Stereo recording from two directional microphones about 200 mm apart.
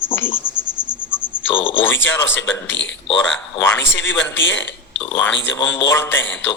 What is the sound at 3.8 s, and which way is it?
Speech, 65° left (ahead or behind).